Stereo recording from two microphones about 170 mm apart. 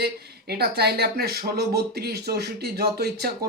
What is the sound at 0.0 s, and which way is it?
Speech, 65° right (ahead or behind).